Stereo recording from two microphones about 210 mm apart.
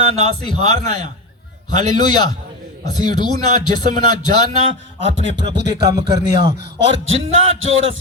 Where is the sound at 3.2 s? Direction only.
90° right.